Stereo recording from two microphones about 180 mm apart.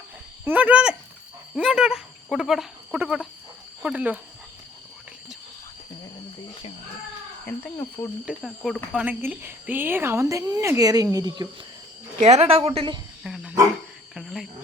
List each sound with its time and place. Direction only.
0.4 s speech: 10° right (ahead or behind)
7.4 s speech: 10° left (ahead or behind)
8.2 s speech: 5° right (ahead or behind); by 11.4 s 20° right (ahead or behind)
12.2 s a woman's voice: 35° right (ahead or behind)
13.2 s speech: 5° right (ahead or behind)